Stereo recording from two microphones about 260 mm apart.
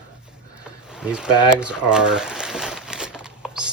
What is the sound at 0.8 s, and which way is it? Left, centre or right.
Speech, centre.